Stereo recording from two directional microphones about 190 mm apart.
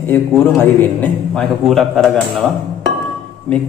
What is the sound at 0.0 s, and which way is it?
A man's voice, 10° left (ahead or behind).